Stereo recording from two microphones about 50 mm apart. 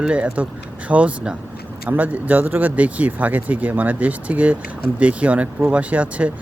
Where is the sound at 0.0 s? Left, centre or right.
Right.